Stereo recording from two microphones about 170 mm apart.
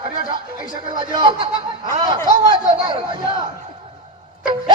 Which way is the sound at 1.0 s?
30° right (ahead or behind).